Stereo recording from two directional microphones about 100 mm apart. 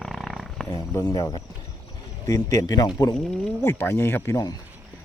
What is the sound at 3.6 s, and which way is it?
Speech, 25° left (ahead or behind).